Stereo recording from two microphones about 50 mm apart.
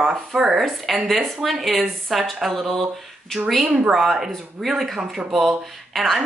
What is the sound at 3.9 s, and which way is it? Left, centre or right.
Speech, centre.